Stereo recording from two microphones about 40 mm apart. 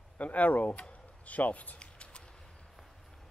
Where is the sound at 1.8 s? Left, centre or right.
Left.